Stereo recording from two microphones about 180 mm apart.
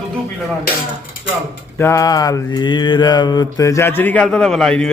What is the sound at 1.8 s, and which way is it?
Mantra, 15° left (ahead or behind).